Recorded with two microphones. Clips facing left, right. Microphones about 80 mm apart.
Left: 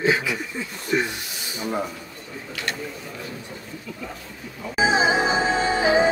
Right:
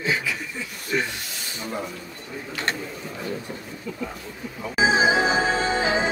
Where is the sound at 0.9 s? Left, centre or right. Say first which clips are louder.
Left 2 dB; centre.